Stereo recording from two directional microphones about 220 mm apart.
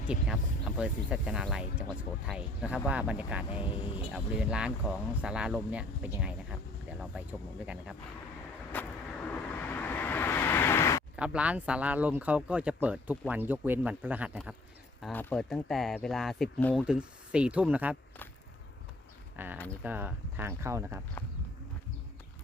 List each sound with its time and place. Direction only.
0.1 s speech: 5° right (ahead or behind)
3.8 s speech: 20° left (ahead or behind)
4.1 s speech: 5° right (ahead or behind)
8.7 s vehicle: 10° left (ahead or behind)
11.2 s speech: 5° right (ahead or behind)
15.0 s speech: 5° left (ahead or behind)
19.4 s speech: 10° right (ahead or behind)